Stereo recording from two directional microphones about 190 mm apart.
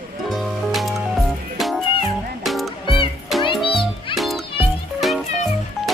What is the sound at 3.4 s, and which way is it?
Music, 25° left (ahead or behind).